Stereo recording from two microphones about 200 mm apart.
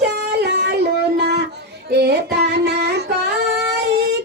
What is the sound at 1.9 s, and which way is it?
Music, 55° right (ahead or behind).